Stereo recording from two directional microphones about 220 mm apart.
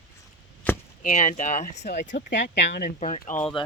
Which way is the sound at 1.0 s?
30° left (ahead or behind).